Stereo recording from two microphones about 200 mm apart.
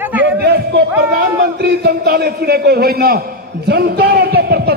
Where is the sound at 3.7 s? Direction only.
55° right (ahead or behind).